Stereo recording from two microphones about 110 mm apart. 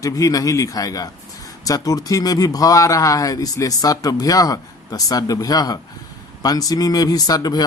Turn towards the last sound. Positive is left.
turn(degrees=35)  # may be behind; listen again after turning